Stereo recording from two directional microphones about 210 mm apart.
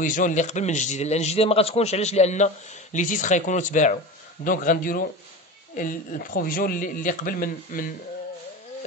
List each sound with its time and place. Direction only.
0.0 s a man's voice: 35° left (ahead or behind)